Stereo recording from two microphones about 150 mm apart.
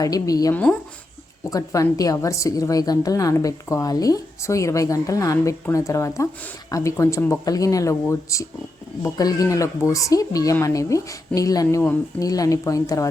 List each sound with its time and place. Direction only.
0.0 s a woman's voice: 25° left (ahead or behind)
0.5 s speech: 10° left (ahead or behind)
1.5 s a woman's voice: 20° left (ahead or behind)